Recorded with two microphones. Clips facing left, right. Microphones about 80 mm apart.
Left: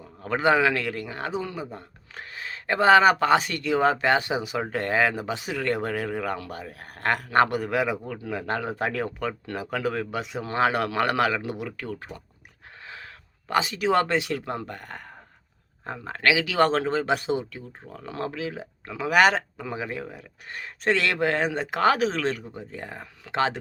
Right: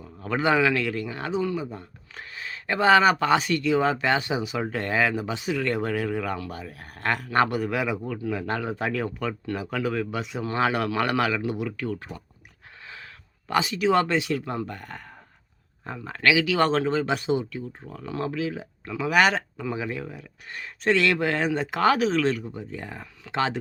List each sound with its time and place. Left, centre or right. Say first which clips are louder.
0.2 s speech: left 1 dB; left
8.1 s speech: right 1 dB; left
13.5 s speech: right 1 dB; left
19.5 s speech: right 2 dB; left